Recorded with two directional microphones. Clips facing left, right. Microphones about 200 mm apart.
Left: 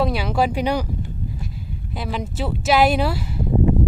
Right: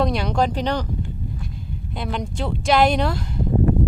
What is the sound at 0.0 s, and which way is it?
Speech, 5° left (ahead or behind).